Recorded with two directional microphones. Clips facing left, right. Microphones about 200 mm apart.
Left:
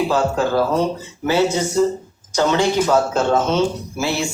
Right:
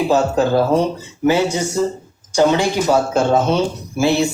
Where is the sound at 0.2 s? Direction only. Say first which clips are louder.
Right 3 dB; 25° right (ahead or behind).